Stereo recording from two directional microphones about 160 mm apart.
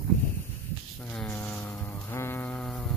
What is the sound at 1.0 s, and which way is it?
Music, 10° left (ahead or behind).